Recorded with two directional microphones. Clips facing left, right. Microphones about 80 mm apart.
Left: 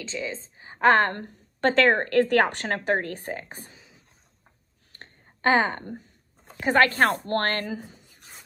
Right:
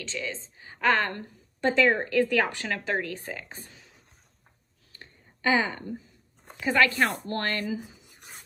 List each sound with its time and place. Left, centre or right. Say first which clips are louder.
0.1 s a woman's voice: left 3 dB; left
1.6 s a woman's voice: left 3 dB; left
2.6 s a woman's voice: left 4 dB; left
4.9 s a sound: left 2 dB; left
6.6 s a woman's voice: left 3 dB; left